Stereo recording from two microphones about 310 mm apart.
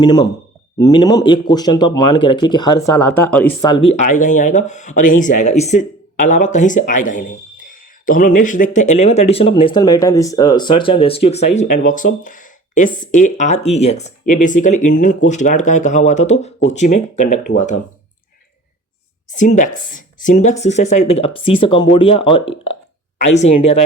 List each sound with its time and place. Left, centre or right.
0.0 s speech: centre
19.4 s speech: left